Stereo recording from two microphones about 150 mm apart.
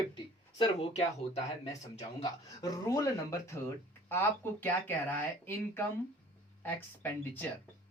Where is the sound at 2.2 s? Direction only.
25° left (ahead or behind).